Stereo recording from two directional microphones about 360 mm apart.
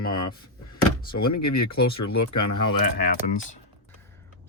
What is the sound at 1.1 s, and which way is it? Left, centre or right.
Speech, left.